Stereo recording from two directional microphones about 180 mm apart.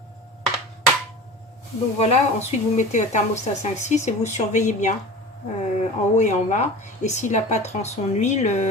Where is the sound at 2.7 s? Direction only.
40° left (ahead or behind).